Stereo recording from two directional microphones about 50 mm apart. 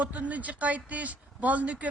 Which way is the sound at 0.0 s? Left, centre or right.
Right.